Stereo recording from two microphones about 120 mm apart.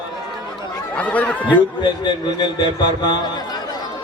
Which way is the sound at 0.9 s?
10° left (ahead or behind).